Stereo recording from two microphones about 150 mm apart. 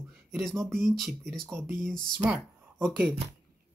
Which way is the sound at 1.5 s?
20° right (ahead or behind).